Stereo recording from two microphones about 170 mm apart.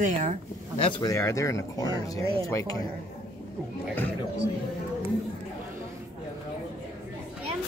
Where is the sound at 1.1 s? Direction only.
15° left (ahead or behind).